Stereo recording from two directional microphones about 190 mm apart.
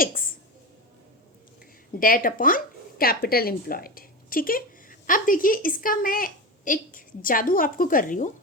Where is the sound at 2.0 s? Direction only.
50° left (ahead or behind).